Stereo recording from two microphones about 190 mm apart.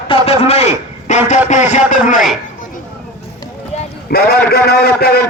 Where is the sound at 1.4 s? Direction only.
40° left (ahead or behind).